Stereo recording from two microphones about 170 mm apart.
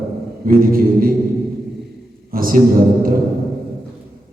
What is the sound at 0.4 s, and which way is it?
Mantra, 55° right (ahead or behind).